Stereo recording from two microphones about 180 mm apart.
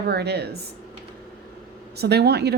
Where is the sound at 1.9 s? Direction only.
65° right (ahead or behind).